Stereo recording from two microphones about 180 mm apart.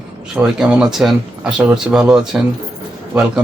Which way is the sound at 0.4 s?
5° right (ahead or behind).